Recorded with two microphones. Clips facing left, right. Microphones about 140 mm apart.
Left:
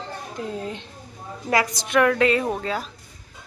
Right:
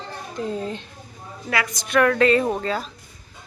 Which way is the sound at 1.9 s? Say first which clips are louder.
Right 2 dB; 15° left (ahead or behind).